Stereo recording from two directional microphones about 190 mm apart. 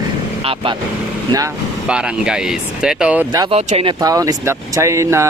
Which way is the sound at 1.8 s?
5° right (ahead or behind).